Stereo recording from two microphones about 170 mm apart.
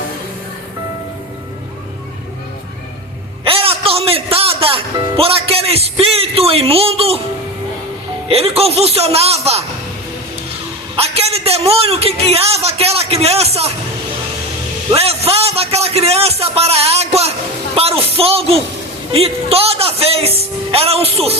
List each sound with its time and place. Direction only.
3.4 s music: 35° right (ahead or behind)
8.3 s a man's voice: 35° right (ahead or behind)
10.9 s a man's voice: 35° right (ahead or behind)
14.9 s a man's voice: 35° right (ahead or behind)
17.7 s a sound: 35° right (ahead or behind)
19.1 s a man's voice: 35° right (ahead or behind)